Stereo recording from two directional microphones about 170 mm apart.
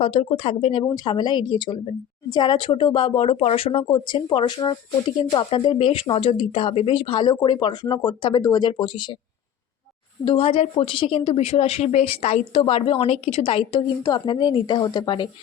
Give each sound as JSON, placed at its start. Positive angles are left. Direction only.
{"t": 0.0, "sound": "speech", "side_deg": 35}
{"t": 10.2, "sound": "speech", "side_deg": 35}